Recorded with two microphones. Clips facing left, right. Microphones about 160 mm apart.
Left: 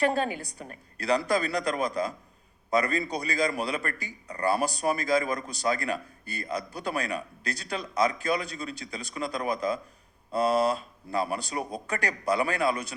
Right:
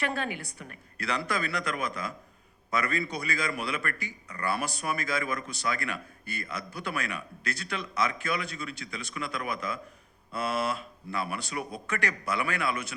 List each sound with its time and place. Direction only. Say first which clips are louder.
0.0 s a man's voice: left 6 dB; 40° left (ahead or behind)